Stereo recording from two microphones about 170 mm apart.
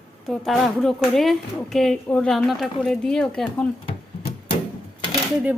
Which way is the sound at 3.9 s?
30° left (ahead or behind).